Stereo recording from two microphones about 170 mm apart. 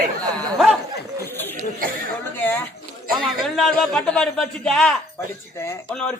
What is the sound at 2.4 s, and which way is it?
A man's voice, 10° left (ahead or behind).